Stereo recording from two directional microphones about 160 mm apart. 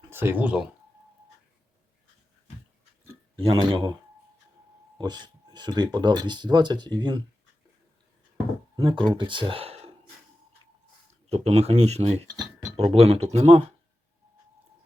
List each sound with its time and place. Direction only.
0.1 s speech: 15° right (ahead or behind)
3.3 s speech: 30° right (ahead or behind)
4.9 s speech: 25° right (ahead or behind)
8.7 s speech: 30° right (ahead or behind)
11.1 s speech: 40° right (ahead or behind)